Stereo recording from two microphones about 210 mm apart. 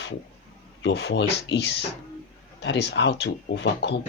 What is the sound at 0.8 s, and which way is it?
Speech, 55° left (ahead or behind).